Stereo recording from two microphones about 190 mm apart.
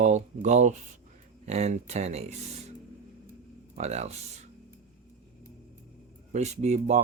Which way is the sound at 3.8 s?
35° right (ahead or behind).